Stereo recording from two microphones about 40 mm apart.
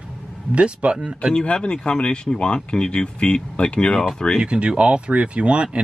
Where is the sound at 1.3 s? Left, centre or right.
Left.